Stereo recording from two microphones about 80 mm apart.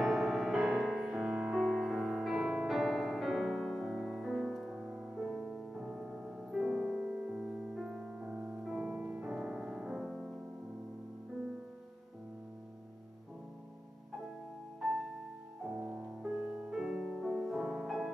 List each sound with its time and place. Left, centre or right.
0.0 s music: centre
15.7 s music: centre